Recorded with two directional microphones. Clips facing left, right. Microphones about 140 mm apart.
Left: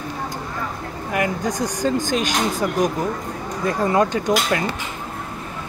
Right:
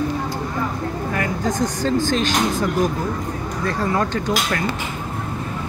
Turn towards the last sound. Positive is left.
turn(degrees=15)  # may be behind; listen again after turning